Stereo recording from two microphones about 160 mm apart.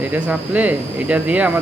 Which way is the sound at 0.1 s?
10° right (ahead or behind).